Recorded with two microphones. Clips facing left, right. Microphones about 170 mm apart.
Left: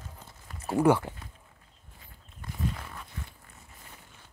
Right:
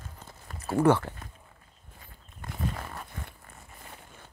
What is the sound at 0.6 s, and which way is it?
Speech, 10° left (ahead or behind).